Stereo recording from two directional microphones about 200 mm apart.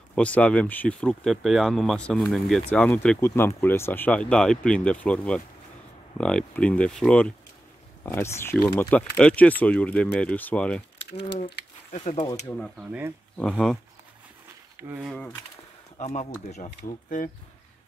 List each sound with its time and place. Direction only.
0.1 s speech: 5° left (ahead or behind)
11.9 s speech: 30° left (ahead or behind)
12.4 s speech: 5° left (ahead or behind)
13.4 s speech: 5° left (ahead or behind)
14.8 s speech: 10° right (ahead or behind)
15.1 s speech: 5° left (ahead or behind)
16.0 s speech: 35° left (ahead or behind)